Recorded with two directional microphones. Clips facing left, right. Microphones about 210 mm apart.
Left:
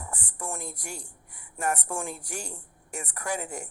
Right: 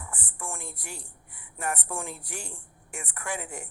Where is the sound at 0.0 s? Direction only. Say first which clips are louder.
Left 2 dB; 40° left (ahead or behind).